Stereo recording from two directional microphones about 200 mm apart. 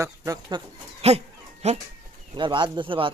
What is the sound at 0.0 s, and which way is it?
Speech, 15° right (ahead or behind).